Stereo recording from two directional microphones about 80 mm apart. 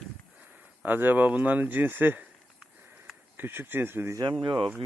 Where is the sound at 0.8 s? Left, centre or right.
Right.